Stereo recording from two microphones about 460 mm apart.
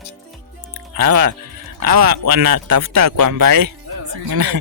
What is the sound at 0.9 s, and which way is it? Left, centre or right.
Speech, right.